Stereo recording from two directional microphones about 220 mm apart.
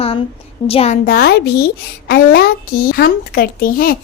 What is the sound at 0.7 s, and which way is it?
Speech, 25° left (ahead or behind).